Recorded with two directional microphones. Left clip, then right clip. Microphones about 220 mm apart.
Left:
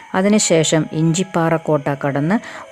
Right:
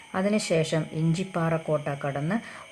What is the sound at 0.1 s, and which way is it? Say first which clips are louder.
Speech: left 10 dB; 35° left (ahead or behind).